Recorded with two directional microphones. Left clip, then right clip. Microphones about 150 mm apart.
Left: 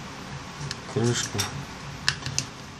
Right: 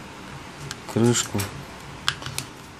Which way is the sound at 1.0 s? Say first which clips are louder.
Right 5 dB; 45° right (ahead or behind).